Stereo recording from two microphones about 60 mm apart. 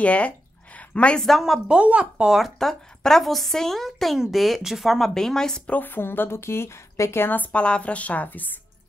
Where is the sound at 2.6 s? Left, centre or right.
Centre.